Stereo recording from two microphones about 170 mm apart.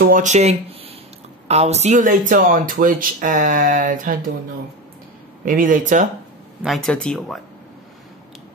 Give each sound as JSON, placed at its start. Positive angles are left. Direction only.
{"t": 0.1, "sound": "speech", "side_deg": -45}
{"t": 5.4, "sound": "speech", "side_deg": -55}
{"t": 6.6, "sound": "speech", "side_deg": 0}